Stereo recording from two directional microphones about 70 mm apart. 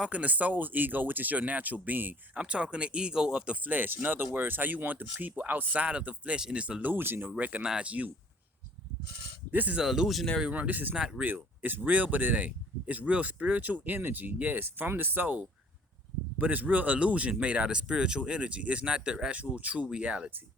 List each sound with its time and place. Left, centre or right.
0.0 s speech: centre
2.4 s speech: centre
6.9 s speech: right
9.5 s speech: right
9.7 s speech: centre
10.4 s speech: right
10.9 s speech: centre
11.9 s speech: right